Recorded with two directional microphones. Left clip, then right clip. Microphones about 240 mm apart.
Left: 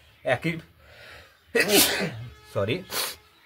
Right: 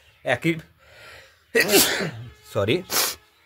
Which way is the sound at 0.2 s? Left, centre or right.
Right.